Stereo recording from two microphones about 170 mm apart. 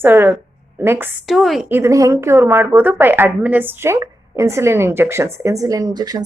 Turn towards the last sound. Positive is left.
turn(degrees=-25)  # may be behind; listen again after turning